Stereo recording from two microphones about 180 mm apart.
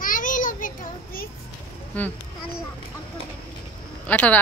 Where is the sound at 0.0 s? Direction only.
50° left (ahead or behind).